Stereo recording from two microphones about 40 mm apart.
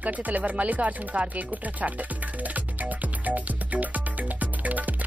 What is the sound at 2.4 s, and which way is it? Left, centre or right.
Music, right.